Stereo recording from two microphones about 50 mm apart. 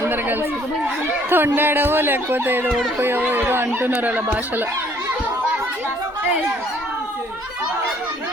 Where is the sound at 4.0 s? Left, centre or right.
Right.